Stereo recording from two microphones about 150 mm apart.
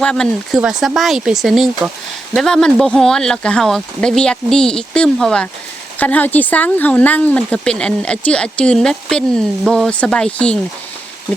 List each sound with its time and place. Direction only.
0.0 s speech: 5° left (ahead or behind)